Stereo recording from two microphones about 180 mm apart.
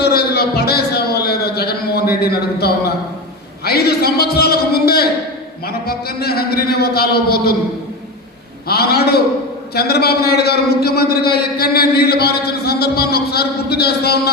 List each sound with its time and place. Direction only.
0.0 s a sound: 60° left (ahead or behind)
3.6 s a man's voice: 60° left (ahead or behind)
8.6 s a man's voice: 60° left (ahead or behind)